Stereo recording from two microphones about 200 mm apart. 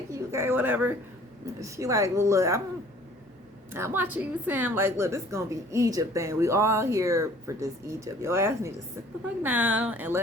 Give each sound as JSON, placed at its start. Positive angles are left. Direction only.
{"t": 0.1, "sound": "a woman's voice", "side_deg": -15}
{"t": 3.7, "sound": "a woman's voice", "side_deg": -10}